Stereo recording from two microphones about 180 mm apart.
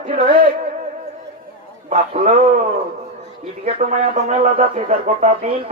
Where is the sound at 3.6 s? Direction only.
35° right (ahead or behind).